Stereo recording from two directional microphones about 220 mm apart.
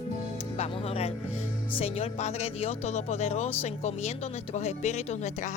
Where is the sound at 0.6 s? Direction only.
25° left (ahead or behind).